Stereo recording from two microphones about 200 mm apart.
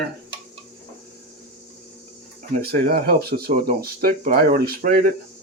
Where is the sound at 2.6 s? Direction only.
50° right (ahead or behind).